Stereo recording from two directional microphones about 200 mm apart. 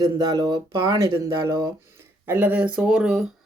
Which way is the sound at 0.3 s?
20° right (ahead or behind).